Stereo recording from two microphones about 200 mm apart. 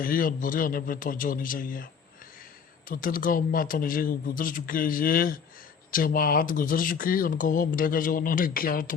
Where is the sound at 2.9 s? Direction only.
45° left (ahead or behind).